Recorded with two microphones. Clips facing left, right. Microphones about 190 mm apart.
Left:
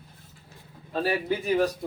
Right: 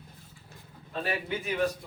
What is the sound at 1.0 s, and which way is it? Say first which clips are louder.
Speech: left 6 dB; 35° left (ahead or behind).